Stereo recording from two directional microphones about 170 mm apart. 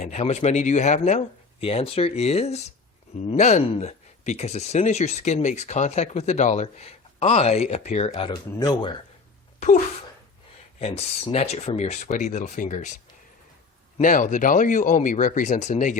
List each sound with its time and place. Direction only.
0.0 s speech: 40° left (ahead or behind)
8.3 s speech: 25° left (ahead or behind)
9.6 s speech: 50° left (ahead or behind)
10.8 s speech: 40° left (ahead or behind)
14.0 s speech: 50° left (ahead or behind)